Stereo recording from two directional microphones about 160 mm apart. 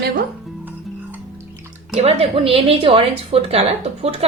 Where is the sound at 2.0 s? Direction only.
40° right (ahead or behind).